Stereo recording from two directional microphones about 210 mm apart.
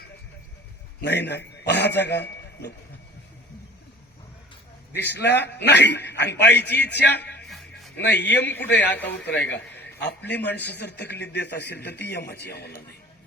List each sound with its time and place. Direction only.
1.0 s a man's voice: 55° left (ahead or behind)
5.0 s a man's voice: 55° left (ahead or behind)
7.4 s music: centre (ahead or behind)
7.9 s a man's voice: 55° left (ahead or behind)